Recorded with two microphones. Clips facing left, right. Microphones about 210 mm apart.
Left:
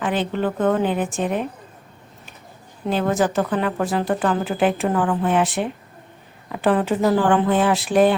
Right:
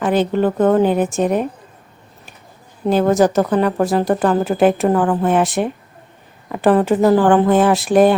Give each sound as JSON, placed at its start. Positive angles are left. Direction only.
{"t": 0.0, "sound": "speech", "side_deg": -45}
{"t": 2.8, "sound": "speech", "side_deg": -40}